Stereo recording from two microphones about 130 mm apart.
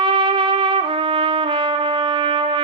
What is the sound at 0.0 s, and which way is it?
Trumpet, 40° right (ahead or behind).